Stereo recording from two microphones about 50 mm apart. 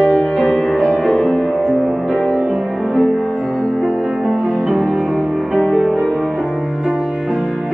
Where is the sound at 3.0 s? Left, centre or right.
Centre.